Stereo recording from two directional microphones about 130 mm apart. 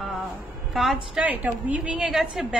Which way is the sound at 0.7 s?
Centre (ahead or behind).